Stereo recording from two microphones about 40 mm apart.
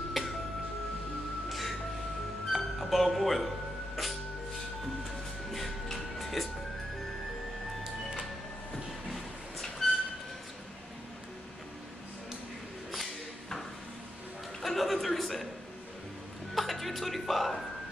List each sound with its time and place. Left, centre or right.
0.2 s music: centre
1.5 s music: centre
5.5 s music: centre
8.7 s a sound: centre
12.9 s a sound: centre
14.6 s chuckle: centre
16.5 s music: centre